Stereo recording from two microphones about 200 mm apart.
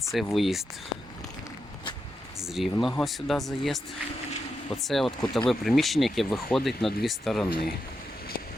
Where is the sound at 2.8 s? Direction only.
Centre (ahead or behind).